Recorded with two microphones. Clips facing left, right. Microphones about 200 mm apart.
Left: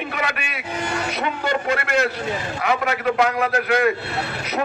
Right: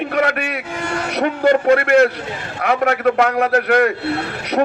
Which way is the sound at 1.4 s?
50° right (ahead or behind).